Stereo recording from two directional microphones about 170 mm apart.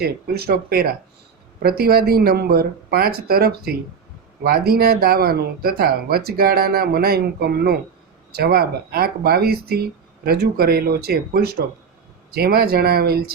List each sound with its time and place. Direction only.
0.0 s speech: 65° right (ahead or behind)